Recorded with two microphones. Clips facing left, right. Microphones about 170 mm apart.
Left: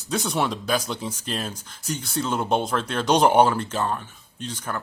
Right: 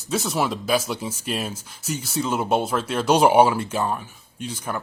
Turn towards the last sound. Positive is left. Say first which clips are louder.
# right 2 dB
turn(degrees=-10)  # may be behind; listen again after turning